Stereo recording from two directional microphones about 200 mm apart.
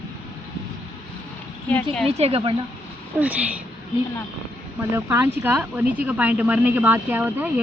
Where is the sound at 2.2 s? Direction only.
30° right (ahead or behind).